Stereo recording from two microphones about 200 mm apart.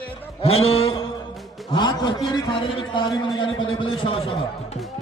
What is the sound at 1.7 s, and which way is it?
A man's voice, 20° left (ahead or behind).